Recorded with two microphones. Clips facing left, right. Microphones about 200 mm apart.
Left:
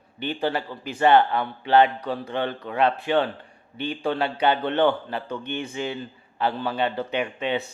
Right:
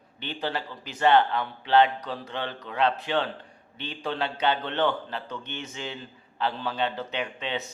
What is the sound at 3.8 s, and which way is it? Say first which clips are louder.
Speech: left 5 dB; 10° left (ahead or behind).